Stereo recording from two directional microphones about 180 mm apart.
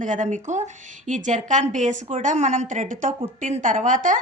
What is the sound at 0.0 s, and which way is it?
A woman's voice, 45° right (ahead or behind).